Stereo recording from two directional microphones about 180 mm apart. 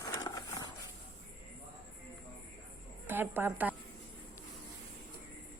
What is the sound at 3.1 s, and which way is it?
Speech, 10° right (ahead or behind).